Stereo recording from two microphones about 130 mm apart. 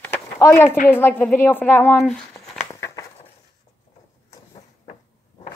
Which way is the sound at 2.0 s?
5° left (ahead or behind).